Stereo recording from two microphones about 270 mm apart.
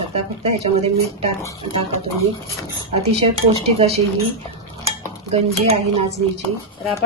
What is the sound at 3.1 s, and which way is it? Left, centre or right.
Speech, right.